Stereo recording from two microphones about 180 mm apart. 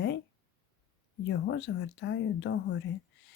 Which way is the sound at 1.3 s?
85° left.